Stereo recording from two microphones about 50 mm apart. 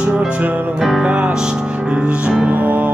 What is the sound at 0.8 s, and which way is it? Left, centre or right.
Music, centre.